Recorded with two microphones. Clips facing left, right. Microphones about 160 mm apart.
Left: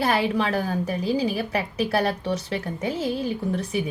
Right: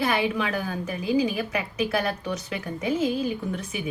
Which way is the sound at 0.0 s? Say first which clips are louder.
Left 2 dB; 35° left (ahead or behind).